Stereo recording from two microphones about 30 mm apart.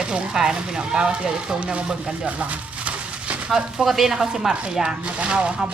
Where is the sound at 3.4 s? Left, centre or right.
Right.